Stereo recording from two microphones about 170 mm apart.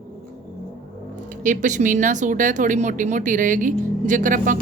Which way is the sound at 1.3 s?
50° right (ahead or behind).